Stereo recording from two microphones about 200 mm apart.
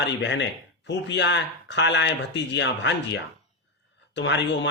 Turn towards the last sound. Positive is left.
turn(degrees=65)  # may be behind; listen again after turning